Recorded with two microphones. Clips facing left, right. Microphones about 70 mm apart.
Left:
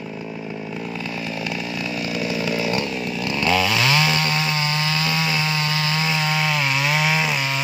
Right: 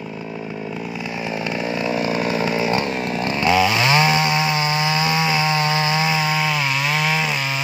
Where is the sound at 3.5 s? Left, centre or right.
Centre.